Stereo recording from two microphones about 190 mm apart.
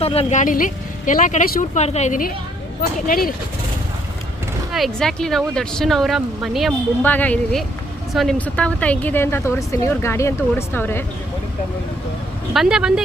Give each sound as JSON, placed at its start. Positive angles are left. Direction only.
{"t": 0.0, "sound": "speech", "side_deg": 30}
{"t": 4.7, "sound": "speech", "side_deg": 0}
{"t": 12.5, "sound": "speech", "side_deg": -5}